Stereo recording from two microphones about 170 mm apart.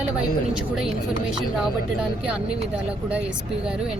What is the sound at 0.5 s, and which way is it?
Speech, centre (ahead or behind).